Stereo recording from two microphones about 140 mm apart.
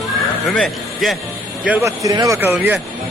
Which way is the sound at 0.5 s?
5° left (ahead or behind).